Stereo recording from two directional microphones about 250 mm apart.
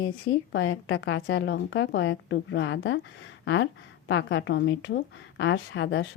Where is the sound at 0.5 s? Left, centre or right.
Left.